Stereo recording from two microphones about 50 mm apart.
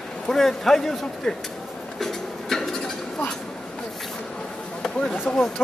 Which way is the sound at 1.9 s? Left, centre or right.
Centre.